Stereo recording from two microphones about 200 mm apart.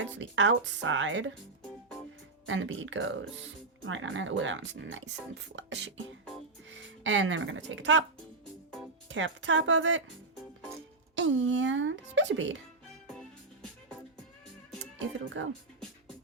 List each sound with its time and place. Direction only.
0.2 s speech: 65° right (ahead or behind)
2.5 s speech: 70° right (ahead or behind)
9.0 s speech: 70° right (ahead or behind)
11.1 s a sound: 65° right (ahead or behind)
15.2 s speech: 70° right (ahead or behind)